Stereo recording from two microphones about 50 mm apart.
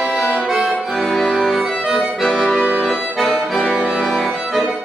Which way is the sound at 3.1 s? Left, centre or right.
Centre.